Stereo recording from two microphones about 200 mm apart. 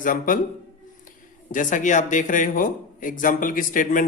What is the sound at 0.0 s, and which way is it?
Speech, 40° left (ahead or behind).